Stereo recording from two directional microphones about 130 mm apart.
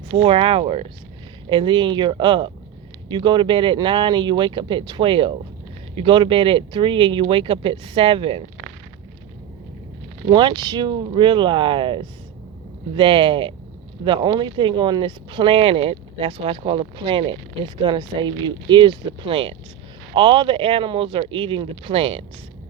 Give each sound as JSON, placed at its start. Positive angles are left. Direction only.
{"t": 0.2, "sound": "speech", "side_deg": -45}
{"t": 10.2, "sound": "speech", "side_deg": -35}